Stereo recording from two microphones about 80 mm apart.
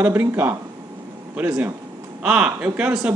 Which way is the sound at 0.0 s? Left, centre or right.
Right.